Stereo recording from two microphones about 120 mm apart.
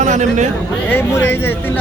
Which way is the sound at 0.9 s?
20° left (ahead or behind).